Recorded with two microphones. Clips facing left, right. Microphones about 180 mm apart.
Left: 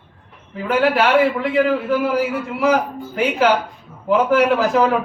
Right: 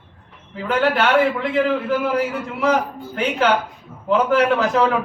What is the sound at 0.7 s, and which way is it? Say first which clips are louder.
A man's voice: left 2 dB; 5° left (ahead or behind).